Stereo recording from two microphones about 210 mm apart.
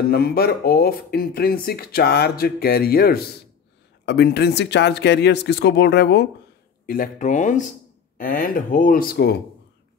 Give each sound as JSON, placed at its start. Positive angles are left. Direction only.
{"t": 0.1, "sound": "speech", "side_deg": 45}
{"t": 6.9, "sound": "speech", "side_deg": 40}